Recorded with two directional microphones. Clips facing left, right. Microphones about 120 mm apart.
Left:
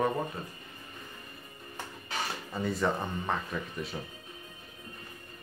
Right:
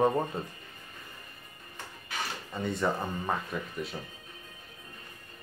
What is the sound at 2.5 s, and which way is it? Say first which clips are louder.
Speech: even; centre (ahead or behind).